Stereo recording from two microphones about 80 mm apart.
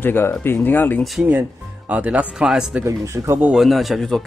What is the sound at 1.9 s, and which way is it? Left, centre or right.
Speech, centre.